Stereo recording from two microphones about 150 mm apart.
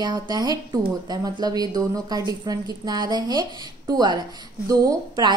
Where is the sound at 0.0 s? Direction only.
30° right (ahead or behind).